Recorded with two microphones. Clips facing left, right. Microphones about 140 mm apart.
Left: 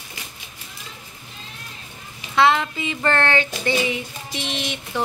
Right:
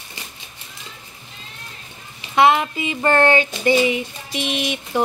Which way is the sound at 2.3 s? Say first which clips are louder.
Right 2 dB; 15° right (ahead or behind).